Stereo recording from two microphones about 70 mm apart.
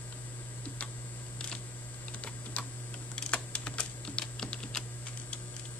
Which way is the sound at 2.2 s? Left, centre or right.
Left.